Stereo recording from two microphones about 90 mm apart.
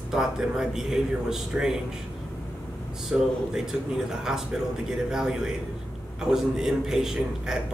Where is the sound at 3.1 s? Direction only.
10° right (ahead or behind).